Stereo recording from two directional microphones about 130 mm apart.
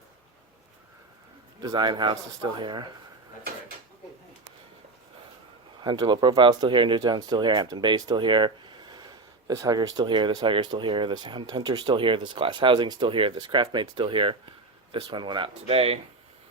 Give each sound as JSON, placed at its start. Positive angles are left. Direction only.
{"t": 1.6, "sound": "speech", "side_deg": -35}
{"t": 5.8, "sound": "speech", "side_deg": -35}